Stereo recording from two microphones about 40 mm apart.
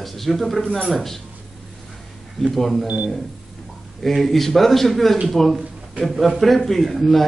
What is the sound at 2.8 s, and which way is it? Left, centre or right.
Speech, right.